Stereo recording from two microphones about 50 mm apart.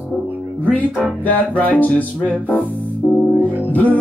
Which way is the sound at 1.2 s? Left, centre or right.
Left.